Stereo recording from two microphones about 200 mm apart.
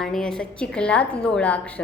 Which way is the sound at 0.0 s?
Centre (ahead or behind).